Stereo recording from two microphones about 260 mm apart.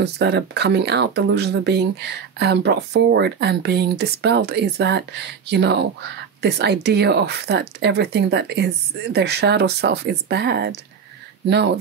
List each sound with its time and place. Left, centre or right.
0.0 s speech: right